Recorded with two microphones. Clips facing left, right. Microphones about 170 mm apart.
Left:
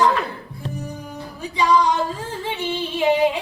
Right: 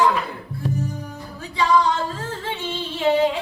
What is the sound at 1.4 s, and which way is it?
Female singing, 15° left (ahead or behind).